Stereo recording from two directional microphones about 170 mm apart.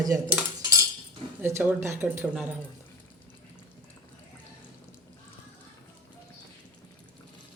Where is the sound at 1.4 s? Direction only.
15° right (ahead or behind).